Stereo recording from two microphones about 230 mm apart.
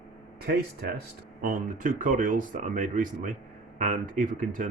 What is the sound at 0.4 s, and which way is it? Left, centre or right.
Speech, right.